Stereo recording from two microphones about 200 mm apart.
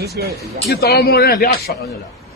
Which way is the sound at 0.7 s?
50° left (ahead or behind).